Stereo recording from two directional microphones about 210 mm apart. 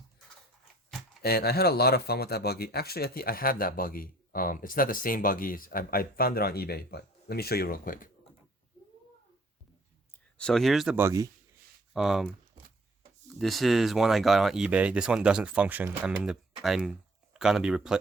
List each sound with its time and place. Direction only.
1.2 s speech: 50° left (ahead or behind)
10.3 s speech: 5° left (ahead or behind); by 11.3 s 15° right (ahead or behind)
11.9 s speech: centre (ahead or behind)